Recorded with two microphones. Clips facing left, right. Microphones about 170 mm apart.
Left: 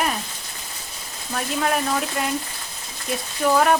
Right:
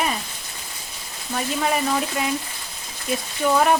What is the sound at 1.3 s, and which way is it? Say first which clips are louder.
Speech: even; centre (ahead or behind).